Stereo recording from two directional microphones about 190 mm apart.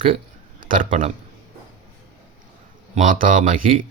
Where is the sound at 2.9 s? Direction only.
45° right (ahead or behind).